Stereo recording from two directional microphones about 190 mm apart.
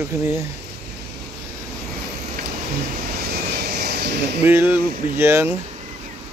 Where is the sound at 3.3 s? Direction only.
60° right (ahead or behind).